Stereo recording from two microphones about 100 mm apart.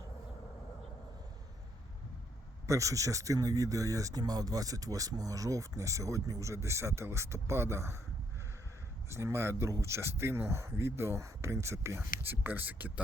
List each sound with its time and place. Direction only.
2.6 s speech: 30° right (ahead or behind)
9.0 s speech: 25° right (ahead or behind)